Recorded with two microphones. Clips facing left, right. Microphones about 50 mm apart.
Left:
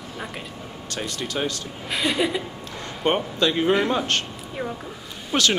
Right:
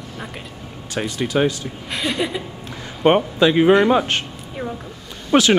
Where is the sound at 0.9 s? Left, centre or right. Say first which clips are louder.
Right 8 dB; centre.